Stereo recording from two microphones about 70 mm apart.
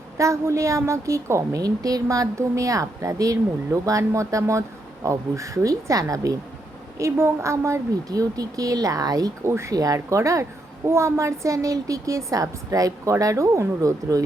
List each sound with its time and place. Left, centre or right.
0.2 s a woman's voice: right
7.0 s a woman's voice: right
9.4 s speech: right
9.7 s a woman's voice: right